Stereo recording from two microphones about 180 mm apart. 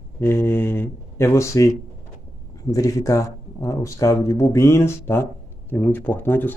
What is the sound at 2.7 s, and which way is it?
Speech, 20° left (ahead or behind).